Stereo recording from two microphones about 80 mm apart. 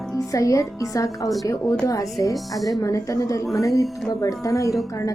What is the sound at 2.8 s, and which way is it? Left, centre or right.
A woman's voice, left.